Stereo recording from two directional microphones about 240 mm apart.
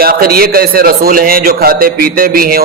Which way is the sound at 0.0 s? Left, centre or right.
Right.